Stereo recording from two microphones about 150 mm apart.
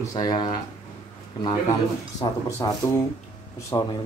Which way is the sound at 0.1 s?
25° left (ahead or behind).